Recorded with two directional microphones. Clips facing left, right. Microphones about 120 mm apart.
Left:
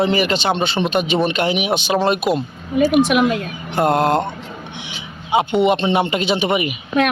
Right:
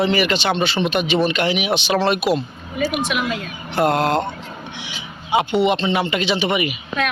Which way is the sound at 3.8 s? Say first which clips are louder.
Left 2 dB; 40° left (ahead or behind).